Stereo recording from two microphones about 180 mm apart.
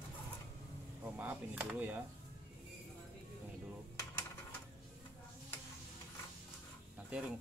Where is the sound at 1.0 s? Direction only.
10° right (ahead or behind).